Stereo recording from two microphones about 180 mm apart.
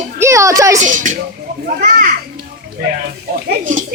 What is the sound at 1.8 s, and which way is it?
Children playing, 50° right (ahead or behind).